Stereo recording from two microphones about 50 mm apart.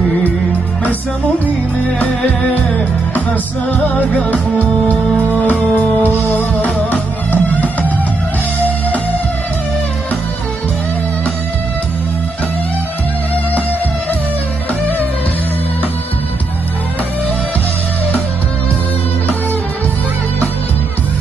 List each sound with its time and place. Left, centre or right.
3.7 s music: left